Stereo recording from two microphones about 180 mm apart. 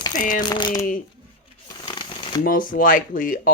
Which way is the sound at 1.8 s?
25° left (ahead or behind).